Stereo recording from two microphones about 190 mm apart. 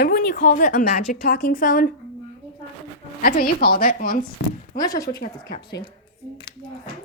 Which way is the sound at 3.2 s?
50° left (ahead or behind).